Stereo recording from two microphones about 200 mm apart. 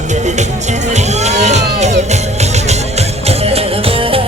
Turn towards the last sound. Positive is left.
turn(degrees=-30)  # may be behind; listen again after turning